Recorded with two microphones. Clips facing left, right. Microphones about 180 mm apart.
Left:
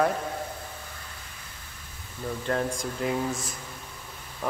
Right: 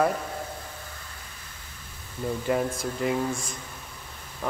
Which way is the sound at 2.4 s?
5° right (ahead or behind).